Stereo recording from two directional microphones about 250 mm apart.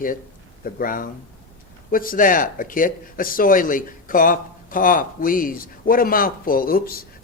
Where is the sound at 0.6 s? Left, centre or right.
Left.